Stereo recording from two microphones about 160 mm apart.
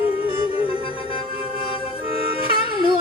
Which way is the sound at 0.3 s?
35° left (ahead or behind).